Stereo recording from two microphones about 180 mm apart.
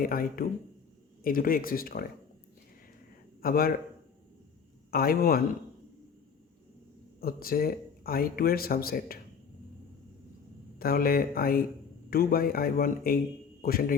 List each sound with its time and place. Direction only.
0.0 s speech: 55° left (ahead or behind)
3.4 s a man's voice: 55° left (ahead or behind)
4.9 s speech: 55° left (ahead or behind)
7.2 s speech: 55° left (ahead or behind)
10.8 s a man's voice: 55° left (ahead or behind)